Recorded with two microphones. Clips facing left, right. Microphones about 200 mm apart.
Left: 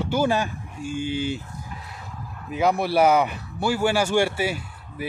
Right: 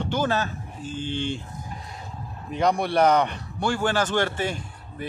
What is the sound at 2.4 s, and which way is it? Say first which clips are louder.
Speech: left 1 dB; 5° left (ahead or behind).